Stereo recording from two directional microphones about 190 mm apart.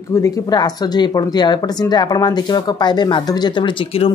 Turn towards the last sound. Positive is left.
turn(degrees=25)  # may be behind; listen again after turning